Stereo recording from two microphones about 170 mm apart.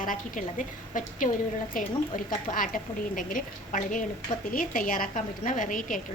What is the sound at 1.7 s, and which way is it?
A woman's voice, 55° left (ahead or behind).